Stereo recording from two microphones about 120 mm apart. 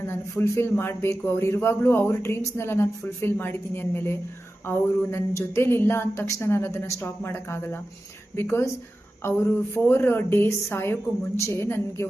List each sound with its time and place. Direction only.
0.0 s speech: 20° left (ahead or behind)